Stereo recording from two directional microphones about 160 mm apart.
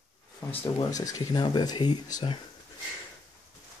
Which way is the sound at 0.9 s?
20° left (ahead or behind).